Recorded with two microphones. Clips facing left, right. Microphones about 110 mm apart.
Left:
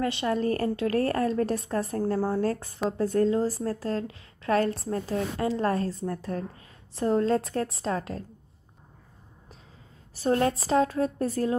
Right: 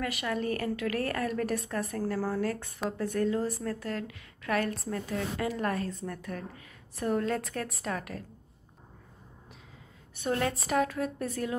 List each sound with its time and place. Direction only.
0.0 s a woman's voice: 30° left (ahead or behind)
10.1 s a woman's voice: 30° left (ahead or behind)